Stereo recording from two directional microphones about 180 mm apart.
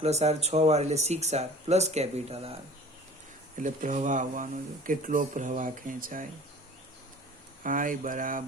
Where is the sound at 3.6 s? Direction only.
45° right (ahead or behind).